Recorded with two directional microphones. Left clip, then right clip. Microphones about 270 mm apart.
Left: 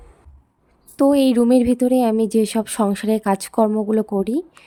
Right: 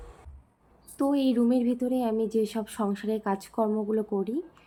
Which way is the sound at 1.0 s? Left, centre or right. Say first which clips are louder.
Left 10 dB; left.